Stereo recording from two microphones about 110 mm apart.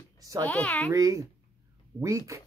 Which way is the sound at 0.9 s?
30° right (ahead or behind).